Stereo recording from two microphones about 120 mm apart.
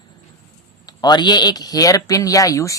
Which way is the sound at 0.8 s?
35° left (ahead or behind).